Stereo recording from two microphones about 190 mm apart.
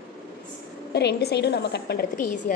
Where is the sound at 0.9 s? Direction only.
60° left (ahead or behind); by 2.5 s 45° left (ahead or behind).